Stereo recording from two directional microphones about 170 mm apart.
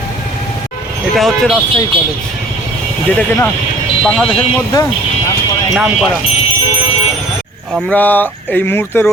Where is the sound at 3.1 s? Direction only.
10° left (ahead or behind).